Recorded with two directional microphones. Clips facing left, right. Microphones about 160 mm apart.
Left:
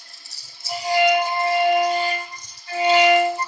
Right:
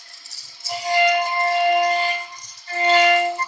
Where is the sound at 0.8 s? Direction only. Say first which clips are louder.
Left 1 dB; 5° left (ahead or behind).